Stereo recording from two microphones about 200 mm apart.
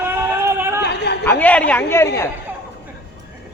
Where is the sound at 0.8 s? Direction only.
55° left (ahead or behind).